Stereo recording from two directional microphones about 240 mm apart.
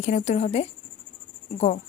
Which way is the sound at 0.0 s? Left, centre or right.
Left.